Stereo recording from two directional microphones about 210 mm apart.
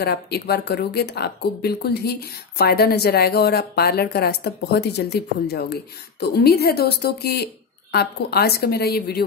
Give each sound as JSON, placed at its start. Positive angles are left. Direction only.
{"t": 0.0, "sound": "speech", "side_deg": 50}